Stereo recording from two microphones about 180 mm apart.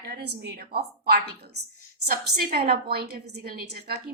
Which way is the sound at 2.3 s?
60° right (ahead or behind).